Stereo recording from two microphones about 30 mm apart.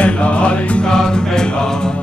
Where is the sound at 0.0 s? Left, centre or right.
Left.